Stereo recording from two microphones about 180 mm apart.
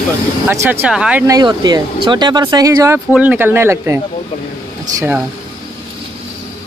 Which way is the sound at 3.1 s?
10° right (ahead or behind).